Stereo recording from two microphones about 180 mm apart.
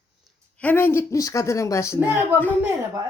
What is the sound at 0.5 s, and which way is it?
Speech, 10° left (ahead or behind).